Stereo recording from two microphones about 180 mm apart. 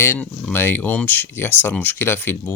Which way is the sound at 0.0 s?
10° left (ahead or behind).